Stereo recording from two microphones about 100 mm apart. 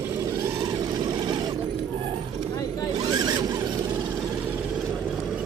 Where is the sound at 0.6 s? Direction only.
55° right (ahead or behind).